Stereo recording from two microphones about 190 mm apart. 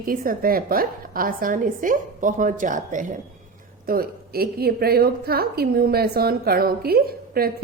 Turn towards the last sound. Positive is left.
turn(degrees=-50)  # may be behind; listen again after turning